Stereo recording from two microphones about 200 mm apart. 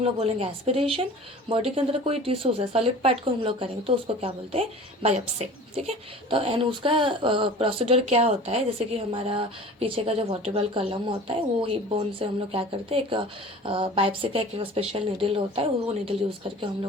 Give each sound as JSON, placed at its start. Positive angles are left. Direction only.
{"t": 0.0, "sound": "a woman's voice", "side_deg": -30}